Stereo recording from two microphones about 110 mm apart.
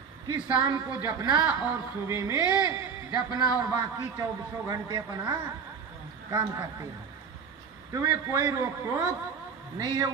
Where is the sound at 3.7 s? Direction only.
30° right (ahead or behind).